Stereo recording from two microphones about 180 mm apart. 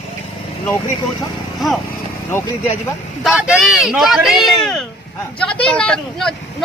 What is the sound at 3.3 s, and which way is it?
Speech, 5° right (ahead or behind).